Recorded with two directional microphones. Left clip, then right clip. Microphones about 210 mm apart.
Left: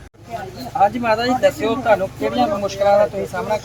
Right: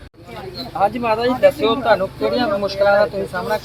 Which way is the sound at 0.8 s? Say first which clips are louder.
Left 2 dB; 10° right (ahead or behind).